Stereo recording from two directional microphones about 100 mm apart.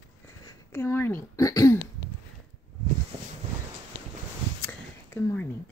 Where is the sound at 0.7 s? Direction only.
25° left (ahead or behind).